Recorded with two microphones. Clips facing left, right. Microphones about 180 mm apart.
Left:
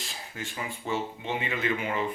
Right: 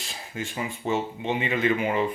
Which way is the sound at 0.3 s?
20° right (ahead or behind).